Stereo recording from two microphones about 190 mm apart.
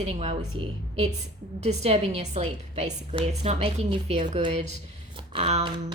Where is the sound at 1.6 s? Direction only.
35° right (ahead or behind).